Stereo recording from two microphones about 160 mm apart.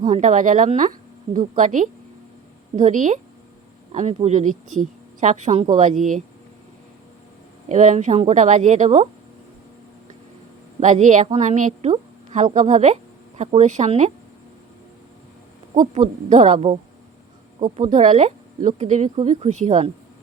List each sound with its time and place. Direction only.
0.1 s a woman's voice: 50° right (ahead or behind)
7.7 s a woman's voice: 50° right (ahead or behind)
10.8 s a woman's voice: 50° right (ahead or behind)
16.0 s a woman's voice: 50° right (ahead or behind)
17.8 s a woman's voice: 50° right (ahead or behind)